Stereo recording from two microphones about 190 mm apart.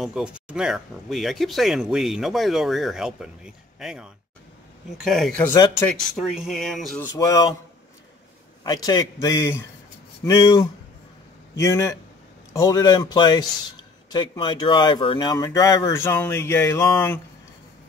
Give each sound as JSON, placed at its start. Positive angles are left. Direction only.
{"t": 0.0, "sound": "speech", "side_deg": -5}
{"t": 5.5, "sound": "speech", "side_deg": 15}
{"t": 5.9, "sound": "speech", "side_deg": 0}
{"t": 7.0, "sound": "speech", "side_deg": 15}
{"t": 8.6, "sound": "speech", "side_deg": 20}